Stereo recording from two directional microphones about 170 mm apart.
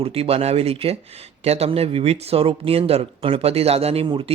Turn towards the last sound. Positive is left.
turn(degrees=-30)  # may be behind; listen again after turning